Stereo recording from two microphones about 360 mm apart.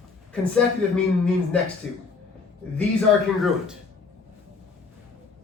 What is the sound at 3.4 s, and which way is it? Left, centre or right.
Speech, centre.